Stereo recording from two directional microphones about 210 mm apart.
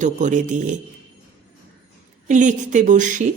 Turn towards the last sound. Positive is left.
turn(degrees=-35)  # may be behind; listen again after turning